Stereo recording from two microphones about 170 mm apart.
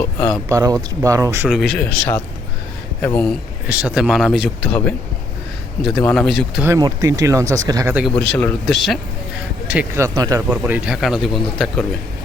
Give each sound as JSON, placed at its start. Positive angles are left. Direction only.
{"t": 0.0, "sound": "speech", "side_deg": 10}
{"t": 0.4, "sound": "speech", "side_deg": -20}
{"t": 1.5, "sound": "speech", "side_deg": 0}
{"t": 3.7, "sound": "speech", "side_deg": -5}
{"t": 6.6, "sound": "speech", "side_deg": -20}
{"t": 8.1, "sound": "speech", "side_deg": 5}
{"t": 9.6, "sound": "speech", "side_deg": -10}
{"t": 10.5, "sound": "speech", "side_deg": -10}